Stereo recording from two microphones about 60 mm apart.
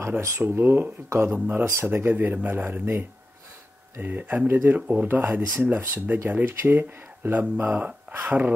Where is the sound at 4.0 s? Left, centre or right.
Right.